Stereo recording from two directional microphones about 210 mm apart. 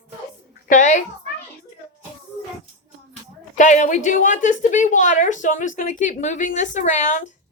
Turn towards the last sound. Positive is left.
turn(degrees=35)  # may be behind; listen again after turning